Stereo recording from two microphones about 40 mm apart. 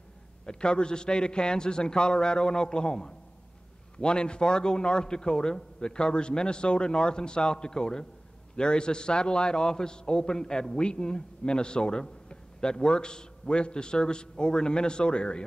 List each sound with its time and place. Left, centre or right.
0.5 s a man's voice: left